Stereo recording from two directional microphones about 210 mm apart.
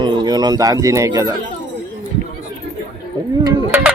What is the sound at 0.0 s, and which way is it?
Speech, 20° right (ahead or behind).